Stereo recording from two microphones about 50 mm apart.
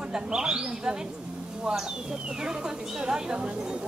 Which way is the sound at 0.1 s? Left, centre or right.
Centre.